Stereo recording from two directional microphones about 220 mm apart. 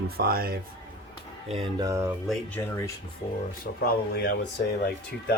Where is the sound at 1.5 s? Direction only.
20° right (ahead or behind).